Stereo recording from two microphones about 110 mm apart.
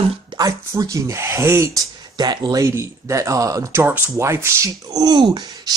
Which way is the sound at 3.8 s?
20° right (ahead or behind).